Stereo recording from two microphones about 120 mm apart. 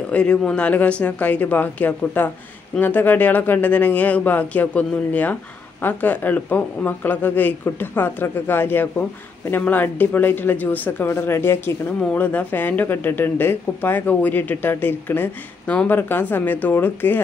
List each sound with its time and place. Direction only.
0.1 s speech: 10° left (ahead or behind)